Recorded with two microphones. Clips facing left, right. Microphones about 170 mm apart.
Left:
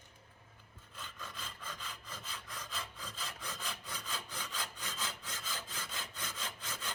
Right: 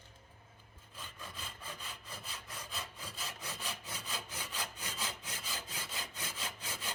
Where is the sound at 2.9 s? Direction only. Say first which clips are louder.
Even; 10° right (ahead or behind).